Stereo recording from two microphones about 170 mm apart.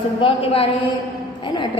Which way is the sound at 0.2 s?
35° left (ahead or behind).